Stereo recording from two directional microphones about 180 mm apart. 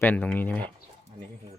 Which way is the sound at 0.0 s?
10° left (ahead or behind).